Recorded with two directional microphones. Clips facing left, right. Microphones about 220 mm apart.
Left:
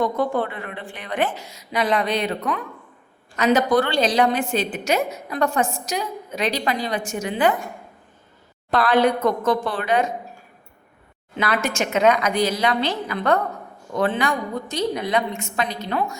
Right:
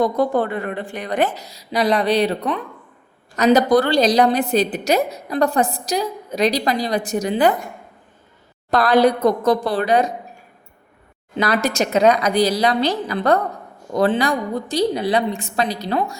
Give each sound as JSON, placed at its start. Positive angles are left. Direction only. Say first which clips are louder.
{"t": 0.0, "sound": "a woman's voice", "louder": "right 4 dB", "side_deg": -40}
{"t": 8.7, "sound": "a woman's voice", "louder": "right 3 dB", "side_deg": -40}
{"t": 11.3, "sound": "a woman's voice", "louder": "right 4 dB", "side_deg": -35}